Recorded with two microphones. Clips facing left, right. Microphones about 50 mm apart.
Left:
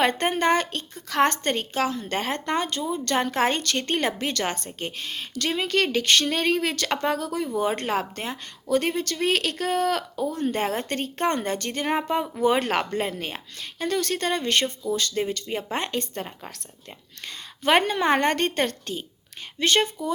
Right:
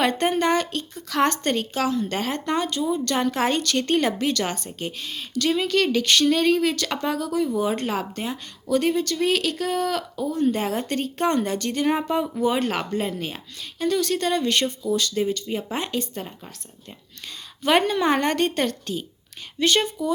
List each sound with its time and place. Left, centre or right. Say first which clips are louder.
0.0 s a woman's voice: right 1 dB; left
12.5 s a woman's voice: even; left
17.6 s a woman's voice: right 1 dB; left